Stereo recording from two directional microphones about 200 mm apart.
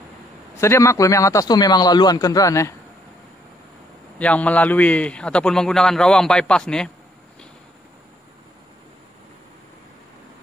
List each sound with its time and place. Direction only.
0.6 s a man's voice: 15° left (ahead or behind)
4.2 s a man's voice: 5° left (ahead or behind)